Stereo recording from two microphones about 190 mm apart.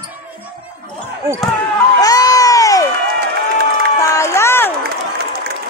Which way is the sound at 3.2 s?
55° right (ahead or behind).